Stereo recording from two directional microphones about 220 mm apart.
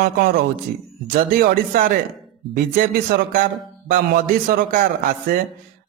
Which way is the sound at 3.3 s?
40° right (ahead or behind).